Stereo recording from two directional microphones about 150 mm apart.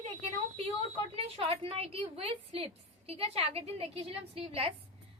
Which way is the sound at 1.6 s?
40° right (ahead or behind).